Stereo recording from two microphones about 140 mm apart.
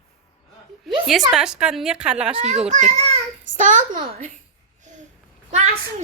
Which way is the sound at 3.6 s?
65° right (ahead or behind).